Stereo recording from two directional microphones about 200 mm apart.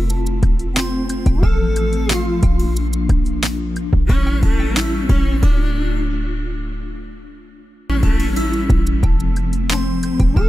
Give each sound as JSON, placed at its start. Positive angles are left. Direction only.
{"t": 0.0, "sound": "music", "side_deg": 0}
{"t": 8.0, "sound": "music", "side_deg": 0}